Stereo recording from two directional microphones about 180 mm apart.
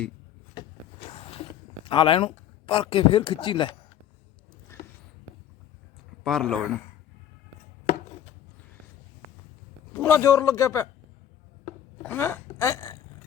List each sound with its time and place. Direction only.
0.5 s a sound: 30° left (ahead or behind)
6.2 s speech: centre (ahead or behind)
9.9 s a man's voice: 10° left (ahead or behind)
12.0 s speech: 10° left (ahead or behind)